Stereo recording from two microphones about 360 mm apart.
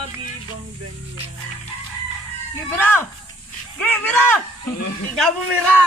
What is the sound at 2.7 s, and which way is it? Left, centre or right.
Speech, centre.